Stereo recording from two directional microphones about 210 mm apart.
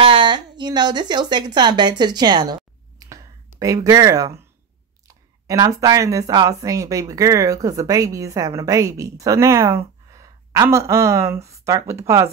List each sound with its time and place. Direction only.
0.0 s a woman's voice: 25° right (ahead or behind)